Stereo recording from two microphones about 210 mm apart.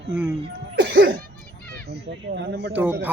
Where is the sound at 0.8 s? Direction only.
55° right (ahead or behind).